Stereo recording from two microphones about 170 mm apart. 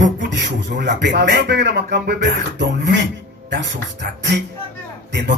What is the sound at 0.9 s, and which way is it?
Speech, 85° right.